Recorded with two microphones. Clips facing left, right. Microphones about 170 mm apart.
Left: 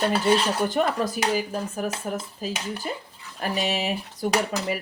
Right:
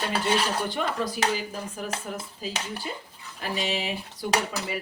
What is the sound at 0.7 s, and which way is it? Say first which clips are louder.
Speech: left 5 dB; 45° left (ahead or behind).